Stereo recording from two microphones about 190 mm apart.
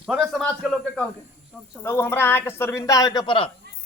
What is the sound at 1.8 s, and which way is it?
A man's voice, 10° left (ahead or behind).